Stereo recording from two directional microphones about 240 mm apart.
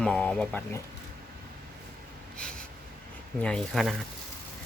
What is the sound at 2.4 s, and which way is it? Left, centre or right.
Snort, centre.